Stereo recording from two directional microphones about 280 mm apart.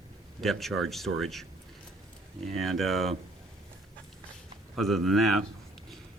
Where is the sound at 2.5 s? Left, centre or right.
Centre.